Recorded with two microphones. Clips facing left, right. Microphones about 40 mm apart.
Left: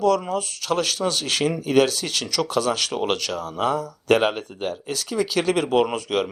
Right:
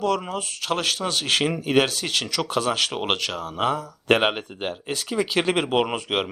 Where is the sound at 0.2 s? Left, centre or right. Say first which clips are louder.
Left 3 dB; right.